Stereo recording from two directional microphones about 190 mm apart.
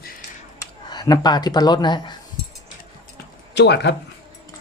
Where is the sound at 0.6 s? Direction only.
20° left (ahead or behind).